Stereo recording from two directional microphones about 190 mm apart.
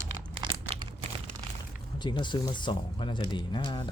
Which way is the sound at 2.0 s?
25° left (ahead or behind).